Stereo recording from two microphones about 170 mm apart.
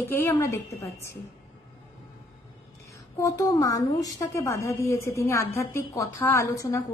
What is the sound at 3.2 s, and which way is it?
A woman's voice, 20° left (ahead or behind).